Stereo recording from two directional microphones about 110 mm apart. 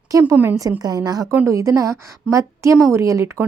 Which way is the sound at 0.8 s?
35° right (ahead or behind).